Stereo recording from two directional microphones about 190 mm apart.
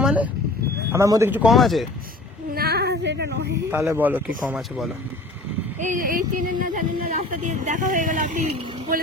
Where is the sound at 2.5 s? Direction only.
55° right (ahead or behind).